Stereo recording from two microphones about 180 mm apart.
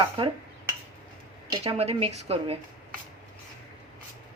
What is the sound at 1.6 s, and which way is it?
Speech, 35° right (ahead or behind).